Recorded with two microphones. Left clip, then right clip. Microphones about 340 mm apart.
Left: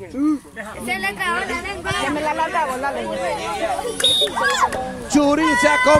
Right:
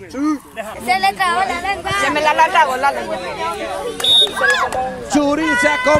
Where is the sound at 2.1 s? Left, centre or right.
Right.